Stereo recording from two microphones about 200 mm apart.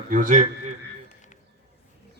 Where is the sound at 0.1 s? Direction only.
40° right (ahead or behind).